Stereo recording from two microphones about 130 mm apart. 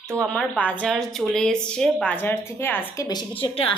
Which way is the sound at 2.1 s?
15° left (ahead or behind).